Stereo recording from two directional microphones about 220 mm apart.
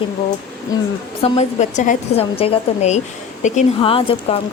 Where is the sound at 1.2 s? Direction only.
30° left (ahead or behind).